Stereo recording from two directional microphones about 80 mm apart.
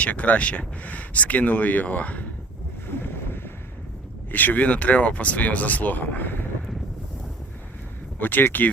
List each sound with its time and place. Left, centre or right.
0.0 s speech: centre
2.8 s boat: left
4.3 s speech: left
8.2 s speech: left